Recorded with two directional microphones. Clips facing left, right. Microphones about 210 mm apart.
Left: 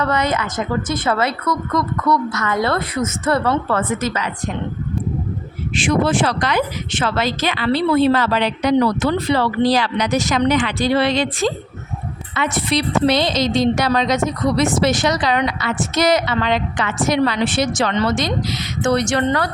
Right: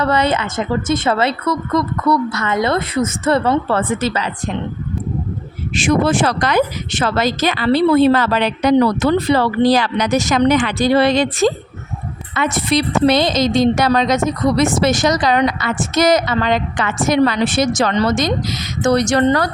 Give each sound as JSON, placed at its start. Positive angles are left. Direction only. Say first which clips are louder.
{"t": 0.0, "sound": "a woman's voice", "louder": "right 3 dB", "side_deg": -30}
{"t": 5.7, "sound": "a woman's voice", "louder": "right 2 dB", "side_deg": -45}